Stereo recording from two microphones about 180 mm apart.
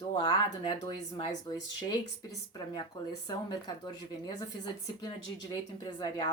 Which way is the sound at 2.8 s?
25° left (ahead or behind).